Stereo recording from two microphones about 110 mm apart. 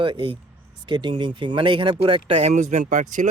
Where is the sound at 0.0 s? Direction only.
50° right (ahead or behind).